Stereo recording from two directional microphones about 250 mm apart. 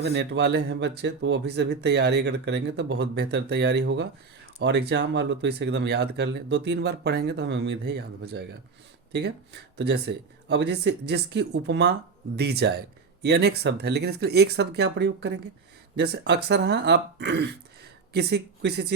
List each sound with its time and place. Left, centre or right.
0.0 s speech: right